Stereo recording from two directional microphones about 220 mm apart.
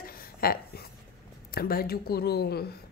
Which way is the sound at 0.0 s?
45° left (ahead or behind).